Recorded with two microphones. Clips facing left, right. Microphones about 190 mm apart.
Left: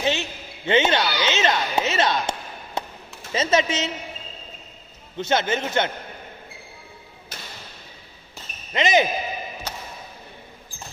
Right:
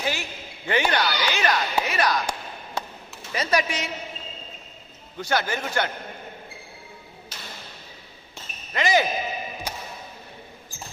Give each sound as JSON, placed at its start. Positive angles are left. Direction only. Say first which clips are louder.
{"t": 0.0, "sound": "basketball bounce", "louder": "left 5 dB", "side_deg": 25}
{"t": 3.3, "sound": "a man's voice", "louder": "left 3 dB", "side_deg": 25}
{"t": 5.1, "sound": "a man's voice", "louder": "left 3 dB", "side_deg": 20}
{"t": 8.7, "sound": "a man's voice", "louder": "left 2 dB", "side_deg": 20}